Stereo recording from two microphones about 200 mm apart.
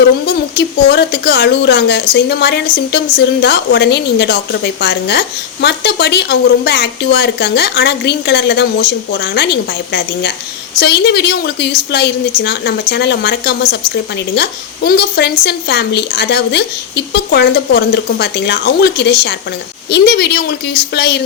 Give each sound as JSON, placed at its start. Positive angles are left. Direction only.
{"t": 0.5, "sound": "a woman's voice", "side_deg": 55}